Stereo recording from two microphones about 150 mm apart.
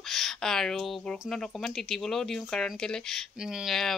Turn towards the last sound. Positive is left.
turn(degrees=0)  # may be behind; listen again after turning